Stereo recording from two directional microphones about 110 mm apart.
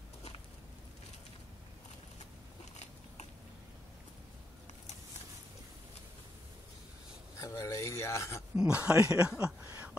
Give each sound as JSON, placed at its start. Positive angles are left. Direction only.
{"t": 2.7, "sound": "biting", "side_deg": 90}
{"t": 7.3, "sound": "a sound", "side_deg": 30}
{"t": 8.5, "sound": "speech", "side_deg": -10}